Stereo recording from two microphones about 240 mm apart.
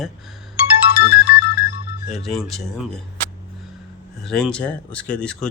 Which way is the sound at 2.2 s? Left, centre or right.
Centre.